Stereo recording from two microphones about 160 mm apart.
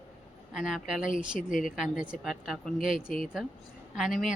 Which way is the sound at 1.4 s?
55° left (ahead or behind).